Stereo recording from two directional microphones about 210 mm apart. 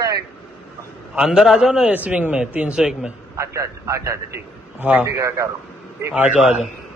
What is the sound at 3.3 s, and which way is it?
A man's voice, 15° right (ahead or behind).